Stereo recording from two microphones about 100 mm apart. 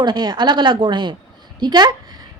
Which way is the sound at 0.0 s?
45° right (ahead or behind).